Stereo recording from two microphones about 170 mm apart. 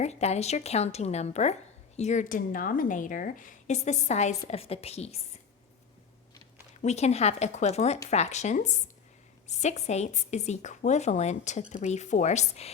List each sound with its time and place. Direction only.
0.0 s a woman's voice: 40° left (ahead or behind)
6.8 s a woman's voice: 40° left (ahead or behind)